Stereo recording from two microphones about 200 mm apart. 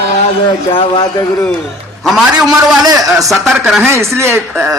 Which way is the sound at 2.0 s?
Centre (ahead or behind).